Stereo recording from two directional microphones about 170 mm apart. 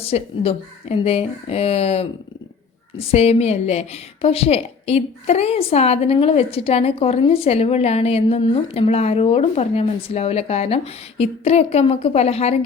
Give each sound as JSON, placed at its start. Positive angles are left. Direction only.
{"t": 0.0, "sound": "a woman's voice", "side_deg": 35}
{"t": 3.1, "sound": "a woman's voice", "side_deg": 35}